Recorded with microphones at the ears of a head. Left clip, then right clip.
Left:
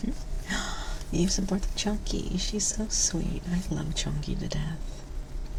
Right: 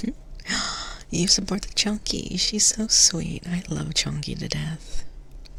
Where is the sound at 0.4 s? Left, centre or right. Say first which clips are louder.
Right 6 dB; right.